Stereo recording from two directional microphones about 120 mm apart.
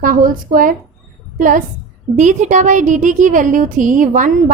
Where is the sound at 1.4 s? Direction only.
90° right.